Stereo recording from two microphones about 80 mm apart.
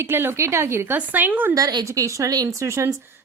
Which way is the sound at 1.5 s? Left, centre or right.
Right.